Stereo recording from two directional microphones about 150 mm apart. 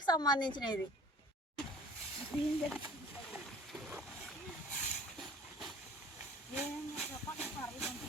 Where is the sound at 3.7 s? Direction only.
5° right (ahead or behind).